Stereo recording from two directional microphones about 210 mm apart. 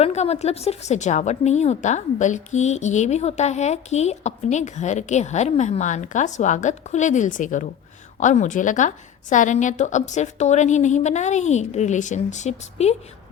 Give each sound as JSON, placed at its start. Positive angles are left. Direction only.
{"t": 0.0, "sound": "a woman's voice", "side_deg": 30}